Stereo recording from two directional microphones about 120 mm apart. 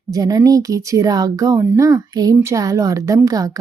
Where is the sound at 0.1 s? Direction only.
30° right (ahead or behind).